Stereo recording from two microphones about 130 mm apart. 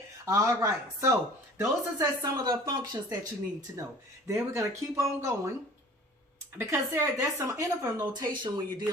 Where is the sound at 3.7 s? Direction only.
25° right (ahead or behind).